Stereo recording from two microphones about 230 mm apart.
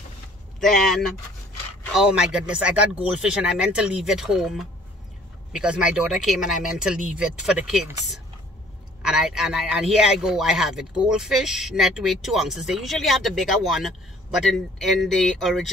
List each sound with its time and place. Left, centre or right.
0.6 s a man's voice: centre